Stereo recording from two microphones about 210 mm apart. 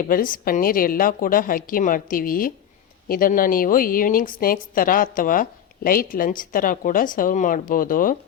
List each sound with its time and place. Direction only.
0.1 s a woman's voice: 40° left (ahead or behind)